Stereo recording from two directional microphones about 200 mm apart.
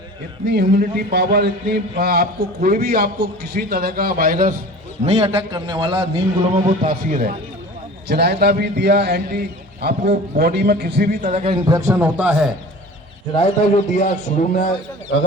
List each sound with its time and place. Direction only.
0.4 s a man's voice: 55° right (ahead or behind)
5.0 s a man's voice: 30° right (ahead or behind)
6.7 s a man's voice: 45° right (ahead or behind)
8.0 s a man's voice: 55° right (ahead or behind); by 12.5 s 5° right (ahead or behind)
13.3 s a man's voice: 30° left (ahead or behind)